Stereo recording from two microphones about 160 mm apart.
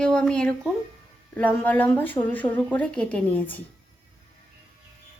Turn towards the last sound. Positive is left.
turn(degrees=10)  # may be behind; listen again after turning